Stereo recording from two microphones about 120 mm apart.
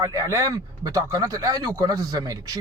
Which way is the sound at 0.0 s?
30° right (ahead or behind).